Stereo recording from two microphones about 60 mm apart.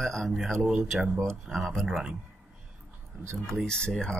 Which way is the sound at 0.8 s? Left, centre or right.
Centre.